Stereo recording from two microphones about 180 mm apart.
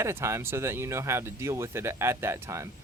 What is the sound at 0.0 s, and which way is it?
Speech, 15° right (ahead or behind).